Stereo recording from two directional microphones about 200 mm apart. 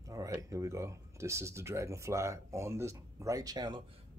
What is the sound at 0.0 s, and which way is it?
Speech, 15° right (ahead or behind).